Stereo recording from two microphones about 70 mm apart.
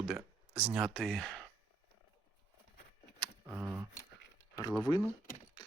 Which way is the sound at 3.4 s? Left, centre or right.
Right.